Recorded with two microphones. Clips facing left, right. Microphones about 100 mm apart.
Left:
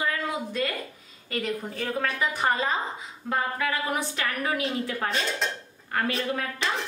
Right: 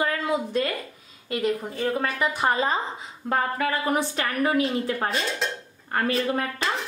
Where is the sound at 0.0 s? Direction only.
40° right (ahead or behind).